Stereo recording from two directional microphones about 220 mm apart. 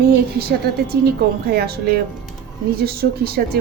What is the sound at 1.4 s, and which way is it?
Speech, 45° right (ahead or behind).